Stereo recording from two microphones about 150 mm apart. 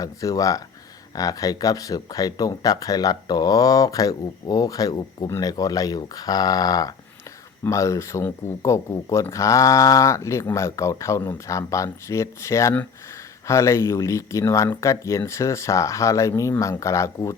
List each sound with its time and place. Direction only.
0.0 s speech: 25° left (ahead or behind)